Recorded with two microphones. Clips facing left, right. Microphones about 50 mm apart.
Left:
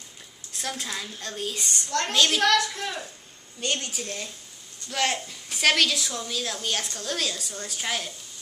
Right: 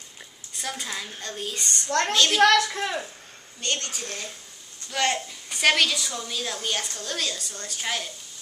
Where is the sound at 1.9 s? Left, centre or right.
Right.